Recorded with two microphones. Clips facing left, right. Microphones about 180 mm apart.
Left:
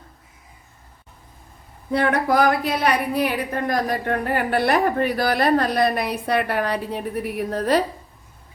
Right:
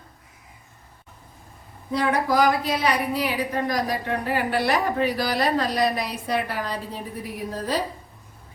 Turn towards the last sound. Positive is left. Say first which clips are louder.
# left 6 dB
turn(degrees=65)  # may be behind; listen again after turning